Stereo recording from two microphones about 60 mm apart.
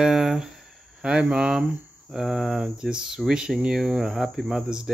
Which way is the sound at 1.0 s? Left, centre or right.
Centre.